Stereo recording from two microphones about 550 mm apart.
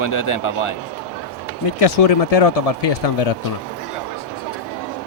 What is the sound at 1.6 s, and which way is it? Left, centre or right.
Speech, left.